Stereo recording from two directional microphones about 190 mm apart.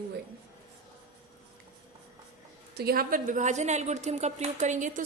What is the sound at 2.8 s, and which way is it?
A woman's voice, 50° right (ahead or behind).